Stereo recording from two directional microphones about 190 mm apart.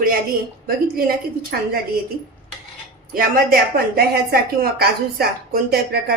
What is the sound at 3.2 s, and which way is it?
A woman's voice, 50° right (ahead or behind).